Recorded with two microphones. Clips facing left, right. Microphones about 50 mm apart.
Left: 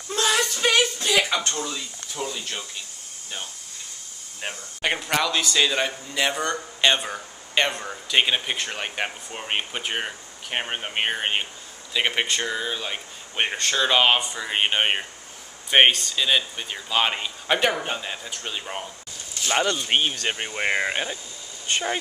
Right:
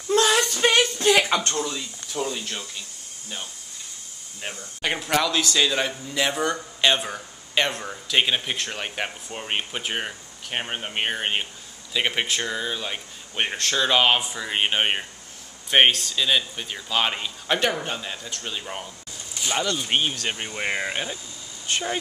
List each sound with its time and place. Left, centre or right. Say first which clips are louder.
0.6 s a sound: right 1 dB; right
1.5 s speech: right 2 dB; centre
4.4 s speech: left 1 dB; centre